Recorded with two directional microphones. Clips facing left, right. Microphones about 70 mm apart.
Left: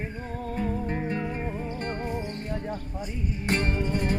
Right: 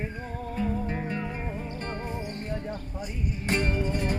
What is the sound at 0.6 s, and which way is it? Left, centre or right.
Music, left.